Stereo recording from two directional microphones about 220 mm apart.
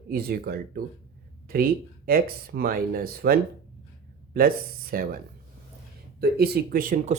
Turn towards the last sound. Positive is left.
turn(degrees=-40)  # may be behind; listen again after turning